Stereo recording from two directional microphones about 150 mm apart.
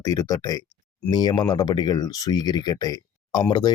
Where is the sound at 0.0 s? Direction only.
25° left (ahead or behind).